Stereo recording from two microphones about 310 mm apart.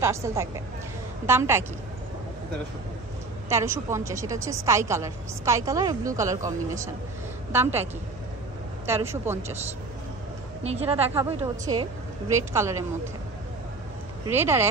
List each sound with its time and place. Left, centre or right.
0.0 s a woman's voice: centre
3.4 s a woman's voice: centre
8.8 s a woman's voice: centre
10.6 s a woman's voice: centre
14.2 s a woman's voice: centre